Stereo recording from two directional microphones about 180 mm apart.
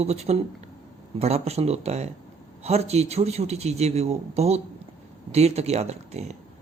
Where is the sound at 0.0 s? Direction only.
35° right (ahead or behind).